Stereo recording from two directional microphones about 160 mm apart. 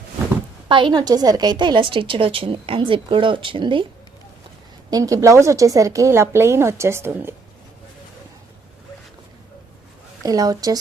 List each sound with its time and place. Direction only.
0.7 s a woman's voice: 30° right (ahead or behind)
4.9 s a woman's voice: 20° right (ahead or behind)
10.2 s a woman's voice: 20° right (ahead or behind)